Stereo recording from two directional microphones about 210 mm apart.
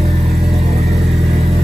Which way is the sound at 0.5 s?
30° right (ahead or behind).